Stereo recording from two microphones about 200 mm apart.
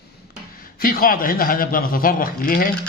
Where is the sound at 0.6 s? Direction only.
45° left (ahead or behind).